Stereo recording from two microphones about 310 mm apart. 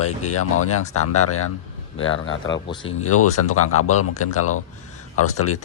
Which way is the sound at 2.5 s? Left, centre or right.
Centre.